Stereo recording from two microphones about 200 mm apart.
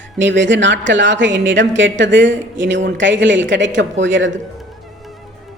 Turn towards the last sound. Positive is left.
turn(degrees=-65)  # may be behind; listen again after turning